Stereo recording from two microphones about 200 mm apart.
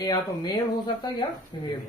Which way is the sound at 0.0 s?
20° left (ahead or behind).